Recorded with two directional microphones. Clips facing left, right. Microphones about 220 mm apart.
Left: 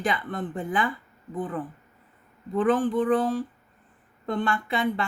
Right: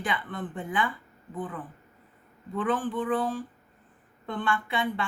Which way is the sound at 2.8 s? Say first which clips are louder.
Left 5 dB; 40° left (ahead or behind).